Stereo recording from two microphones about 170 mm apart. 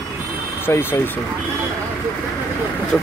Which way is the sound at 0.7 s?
15° left (ahead or behind).